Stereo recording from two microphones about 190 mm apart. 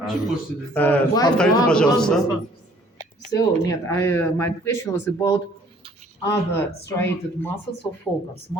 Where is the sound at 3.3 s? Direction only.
15° left (ahead or behind).